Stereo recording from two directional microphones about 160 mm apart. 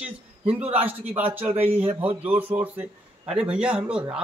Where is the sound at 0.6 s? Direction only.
40° right (ahead or behind).